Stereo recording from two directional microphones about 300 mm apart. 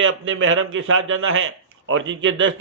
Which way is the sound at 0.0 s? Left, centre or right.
Right.